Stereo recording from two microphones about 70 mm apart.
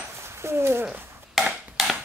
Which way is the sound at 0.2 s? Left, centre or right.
Right.